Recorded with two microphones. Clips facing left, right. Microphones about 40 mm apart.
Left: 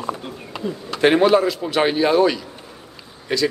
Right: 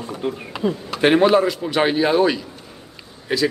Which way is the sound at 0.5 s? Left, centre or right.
Centre.